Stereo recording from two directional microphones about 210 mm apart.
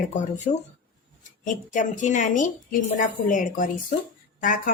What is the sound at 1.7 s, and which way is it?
A woman's voice, 35° left (ahead or behind).